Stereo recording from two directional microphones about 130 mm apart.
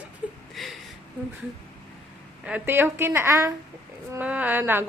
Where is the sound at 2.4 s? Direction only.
15° right (ahead or behind).